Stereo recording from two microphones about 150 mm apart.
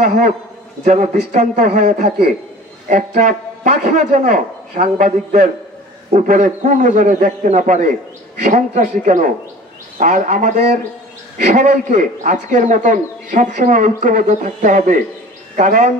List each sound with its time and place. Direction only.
0.0 s a man's voice: 60° right (ahead or behind)